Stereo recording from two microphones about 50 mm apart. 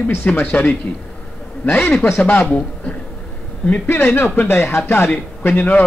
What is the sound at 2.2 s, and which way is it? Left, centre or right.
Speech, left.